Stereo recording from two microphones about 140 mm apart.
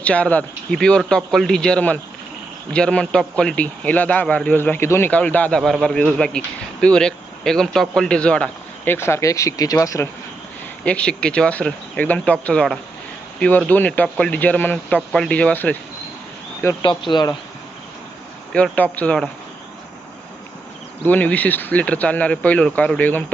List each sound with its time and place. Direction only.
0.0 s a man's voice: 10° left (ahead or behind)
10.8 s a man's voice: 10° left (ahead or behind)
17.1 s speech: 30° left (ahead or behind)
18.5 s a man's voice: 10° left (ahead or behind)
21.0 s a man's voice: 10° left (ahead or behind)